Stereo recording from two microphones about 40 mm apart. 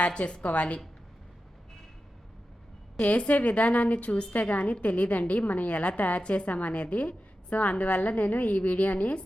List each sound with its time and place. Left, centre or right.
0.0 s a woman's voice: left
3.0 s a woman's voice: left